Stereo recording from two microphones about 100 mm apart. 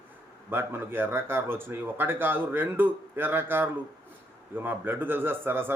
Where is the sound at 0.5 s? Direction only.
20° right (ahead or behind).